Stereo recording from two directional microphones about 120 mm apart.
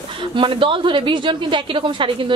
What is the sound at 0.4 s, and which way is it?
A woman's voice, 45° right (ahead or behind).